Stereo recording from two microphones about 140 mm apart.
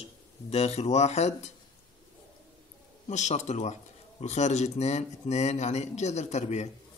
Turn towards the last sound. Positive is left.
turn(degrees=55)  # may be behind; listen again after turning